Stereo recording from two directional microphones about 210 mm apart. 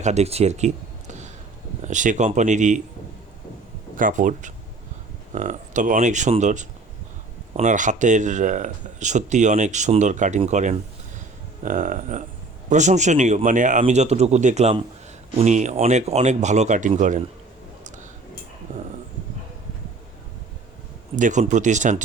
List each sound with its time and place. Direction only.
0.0 s speech: 30° right (ahead or behind)
3.9 s speech: 40° right (ahead or behind)
18.7 s a sound: 40° right (ahead or behind)
21.2 s speech: 35° right (ahead or behind)